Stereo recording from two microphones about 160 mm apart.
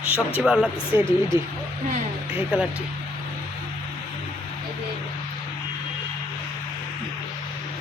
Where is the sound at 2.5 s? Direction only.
10° right (ahead or behind).